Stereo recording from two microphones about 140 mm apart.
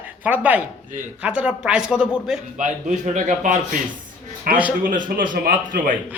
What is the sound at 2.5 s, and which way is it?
A man's voice, 65° right (ahead or behind).